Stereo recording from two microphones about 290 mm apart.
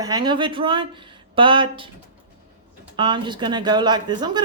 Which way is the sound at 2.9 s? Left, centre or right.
Centre.